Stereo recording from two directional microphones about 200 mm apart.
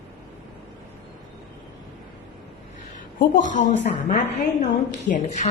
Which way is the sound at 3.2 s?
40° left (ahead or behind).